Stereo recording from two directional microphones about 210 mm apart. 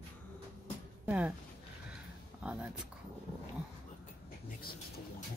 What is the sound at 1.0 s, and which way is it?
Speech, 5° right (ahead or behind).